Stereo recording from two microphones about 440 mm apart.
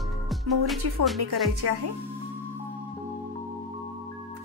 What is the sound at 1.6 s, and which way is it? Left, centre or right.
Music, right.